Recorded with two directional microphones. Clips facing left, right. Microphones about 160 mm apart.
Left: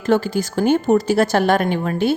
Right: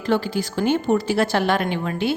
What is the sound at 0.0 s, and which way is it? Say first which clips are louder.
A woman's voice: left 4 dB; 45° left (ahead or behind).